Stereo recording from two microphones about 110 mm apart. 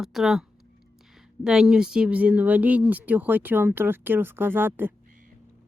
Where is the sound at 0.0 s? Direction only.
5° right (ahead or behind); by 4.9 s 20° right (ahead or behind).